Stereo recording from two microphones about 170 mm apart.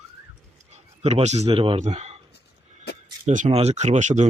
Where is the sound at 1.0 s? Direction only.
40° right (ahead or behind).